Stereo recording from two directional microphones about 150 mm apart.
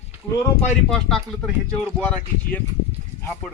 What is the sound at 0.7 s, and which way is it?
Speech, centre (ahead or behind).